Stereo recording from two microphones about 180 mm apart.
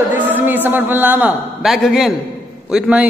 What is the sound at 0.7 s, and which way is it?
A man's voice, 10° right (ahead or behind).